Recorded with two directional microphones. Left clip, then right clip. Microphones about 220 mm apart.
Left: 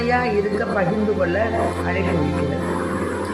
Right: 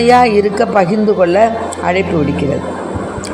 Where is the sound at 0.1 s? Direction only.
30° right (ahead or behind).